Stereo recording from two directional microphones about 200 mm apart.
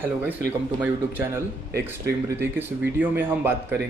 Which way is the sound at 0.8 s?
10° right (ahead or behind).